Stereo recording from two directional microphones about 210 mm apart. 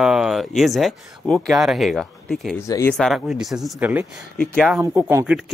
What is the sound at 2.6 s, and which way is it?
Speech, 15° left (ahead or behind).